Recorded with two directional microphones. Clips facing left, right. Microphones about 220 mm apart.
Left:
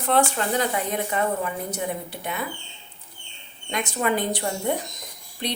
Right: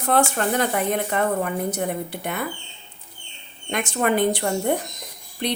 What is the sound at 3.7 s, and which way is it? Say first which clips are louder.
A woman's voice: right 3 dB; 55° right (ahead or behind).